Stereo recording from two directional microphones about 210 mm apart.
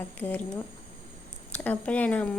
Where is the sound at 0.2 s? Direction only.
5° left (ahead or behind).